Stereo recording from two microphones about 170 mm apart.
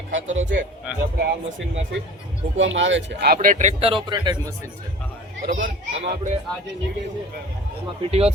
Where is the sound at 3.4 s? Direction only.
45° right (ahead or behind); by 4.5 s 25° right (ahead or behind).